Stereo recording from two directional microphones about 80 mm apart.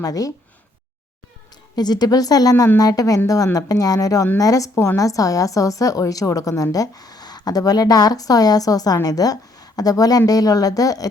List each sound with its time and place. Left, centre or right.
0.0 s a woman's voice: left
1.7 s a woman's voice: left